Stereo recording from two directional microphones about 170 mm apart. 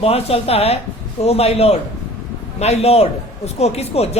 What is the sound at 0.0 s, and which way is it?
A man's voice, 35° left (ahead or behind).